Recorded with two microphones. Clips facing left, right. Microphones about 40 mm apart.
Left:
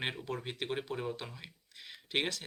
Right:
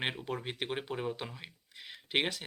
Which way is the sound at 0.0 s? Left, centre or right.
Centre.